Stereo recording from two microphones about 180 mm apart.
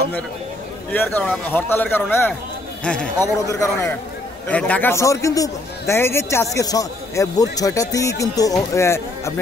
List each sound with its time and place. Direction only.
0.9 s a man's voice: 10° left (ahead or behind)
3.4 s a man's voice: 15° left (ahead or behind)